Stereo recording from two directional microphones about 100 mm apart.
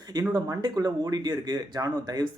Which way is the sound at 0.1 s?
40° right (ahead or behind).